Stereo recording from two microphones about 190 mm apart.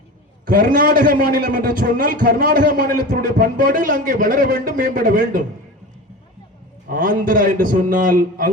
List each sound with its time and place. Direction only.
0.4 s a man's voice: 45° right (ahead or behind)
6.8 s a man's voice: 45° right (ahead or behind)